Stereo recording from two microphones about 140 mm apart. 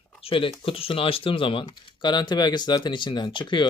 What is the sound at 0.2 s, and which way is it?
Speech, 40° left (ahead or behind).